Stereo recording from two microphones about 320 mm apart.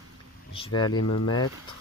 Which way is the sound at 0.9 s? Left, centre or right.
Left.